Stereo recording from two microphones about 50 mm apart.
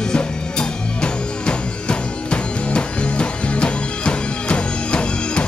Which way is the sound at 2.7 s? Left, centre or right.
Left.